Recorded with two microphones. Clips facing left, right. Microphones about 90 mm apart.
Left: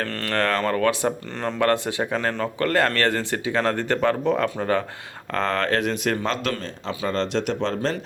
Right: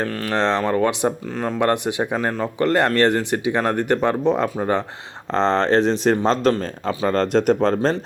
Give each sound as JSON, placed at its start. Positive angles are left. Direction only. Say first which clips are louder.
{"t": 0.0, "sound": "speech", "louder": "right 3 dB", "side_deg": -15}